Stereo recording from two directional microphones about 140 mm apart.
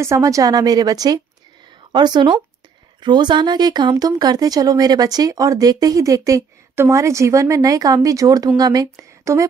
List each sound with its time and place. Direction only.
0.0 s speech: 20° right (ahead or behind)